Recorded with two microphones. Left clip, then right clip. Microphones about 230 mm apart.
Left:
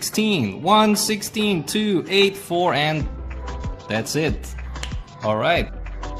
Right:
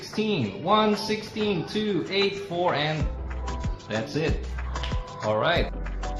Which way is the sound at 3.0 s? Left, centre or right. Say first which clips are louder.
Left 2 dB; centre.